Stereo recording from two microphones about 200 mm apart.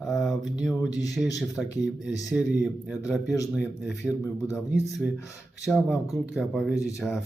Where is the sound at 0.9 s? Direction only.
15° left (ahead or behind).